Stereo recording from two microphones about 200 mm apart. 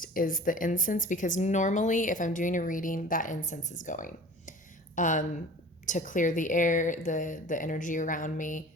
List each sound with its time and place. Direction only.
0.0 s speech: 45° left (ahead or behind)